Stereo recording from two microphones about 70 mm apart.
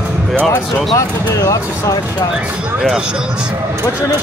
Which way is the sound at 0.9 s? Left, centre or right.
Left.